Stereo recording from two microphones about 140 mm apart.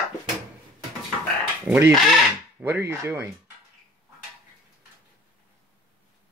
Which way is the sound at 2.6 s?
20° right (ahead or behind).